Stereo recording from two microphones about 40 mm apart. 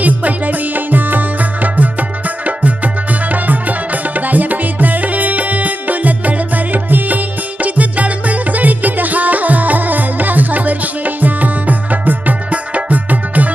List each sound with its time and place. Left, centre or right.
0.0 s music: right